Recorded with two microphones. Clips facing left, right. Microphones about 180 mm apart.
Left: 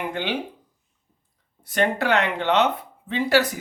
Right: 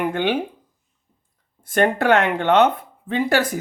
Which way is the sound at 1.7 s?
50° right (ahead or behind).